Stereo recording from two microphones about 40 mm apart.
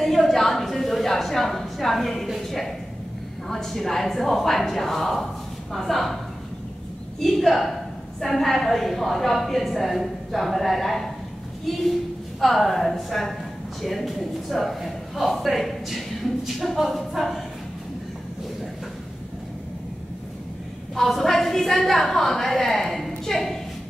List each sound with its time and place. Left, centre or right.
0.0 s a sound: centre
2.4 s a woman's voice: centre
7.2 s a woman's voice: centre
12.4 s a woman's voice: centre
20.9 s a woman's voice: centre